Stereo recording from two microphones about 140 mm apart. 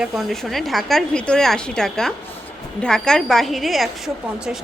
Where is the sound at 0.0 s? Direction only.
Centre (ahead or behind).